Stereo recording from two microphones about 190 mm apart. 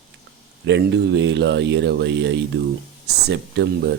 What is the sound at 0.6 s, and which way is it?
Speech, 65° right (ahead or behind).